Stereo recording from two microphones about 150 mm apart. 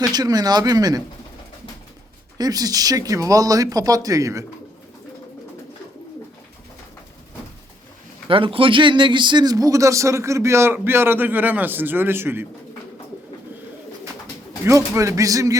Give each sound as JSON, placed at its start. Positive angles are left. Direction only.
{"t": 0.0, "sound": "speech", "side_deg": -25}
{"t": 2.4, "sound": "speech", "side_deg": -25}
{"t": 8.3, "sound": "speech", "side_deg": -35}
{"t": 14.6, "sound": "speech", "side_deg": -20}